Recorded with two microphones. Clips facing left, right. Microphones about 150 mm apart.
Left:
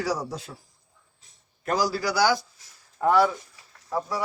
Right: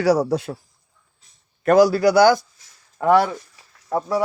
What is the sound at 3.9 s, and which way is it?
Speech, 55° right (ahead or behind).